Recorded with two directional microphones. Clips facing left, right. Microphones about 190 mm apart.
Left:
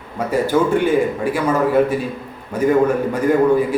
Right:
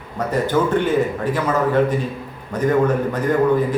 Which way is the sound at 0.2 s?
10° left (ahead or behind).